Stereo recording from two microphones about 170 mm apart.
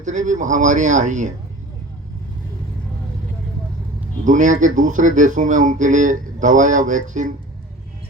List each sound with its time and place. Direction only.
0.0 s speech: 45° right (ahead or behind)
4.2 s speech: 45° right (ahead or behind)